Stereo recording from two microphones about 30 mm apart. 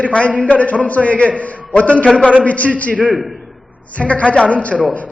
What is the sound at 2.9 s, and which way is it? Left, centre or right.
Speech, right.